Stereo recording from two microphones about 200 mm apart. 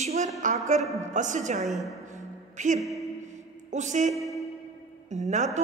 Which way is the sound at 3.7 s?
35° right (ahead or behind).